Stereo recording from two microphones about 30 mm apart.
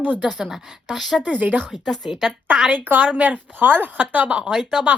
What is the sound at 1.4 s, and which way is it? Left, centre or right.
Speech, right.